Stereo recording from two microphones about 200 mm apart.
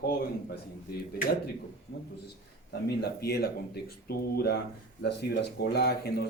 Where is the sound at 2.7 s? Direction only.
55° left (ahead or behind).